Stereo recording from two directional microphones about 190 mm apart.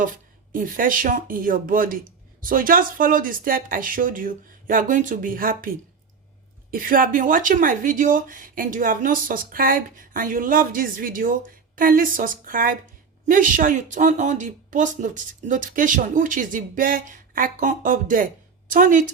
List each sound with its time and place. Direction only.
0.5 s a woman's voice: 45° right (ahead or behind)